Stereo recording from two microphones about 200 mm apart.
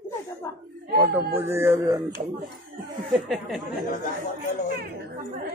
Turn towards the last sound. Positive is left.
turn(degrees=0)  # may be behind; listen again after turning